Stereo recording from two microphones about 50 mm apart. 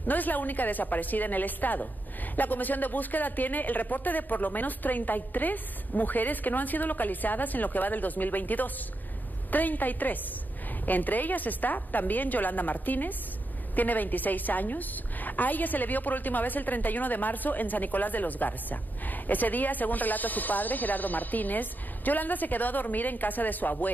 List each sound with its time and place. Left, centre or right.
0.0 s a woman's voice: left